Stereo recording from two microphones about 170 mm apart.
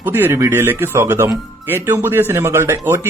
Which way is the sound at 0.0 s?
15° right (ahead or behind).